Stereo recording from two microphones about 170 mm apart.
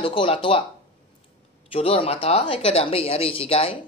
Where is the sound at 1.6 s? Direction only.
35° left (ahead or behind).